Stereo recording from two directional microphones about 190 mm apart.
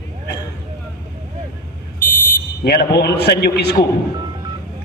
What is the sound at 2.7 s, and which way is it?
A man's voice, 60° left (ahead or behind).